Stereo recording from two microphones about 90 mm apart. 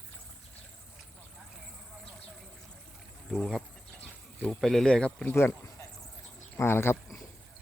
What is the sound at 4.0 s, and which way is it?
Insect, 15° left (ahead or behind).